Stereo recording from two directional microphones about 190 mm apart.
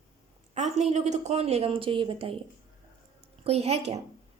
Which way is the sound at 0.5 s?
35° right (ahead or behind).